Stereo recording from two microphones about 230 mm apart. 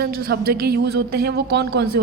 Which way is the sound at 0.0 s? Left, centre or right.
Right.